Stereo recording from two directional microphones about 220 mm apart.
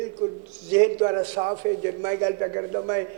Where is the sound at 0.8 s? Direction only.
25° right (ahead or behind).